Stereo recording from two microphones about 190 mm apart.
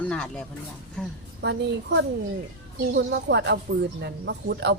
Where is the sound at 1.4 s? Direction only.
65° right (ahead or behind).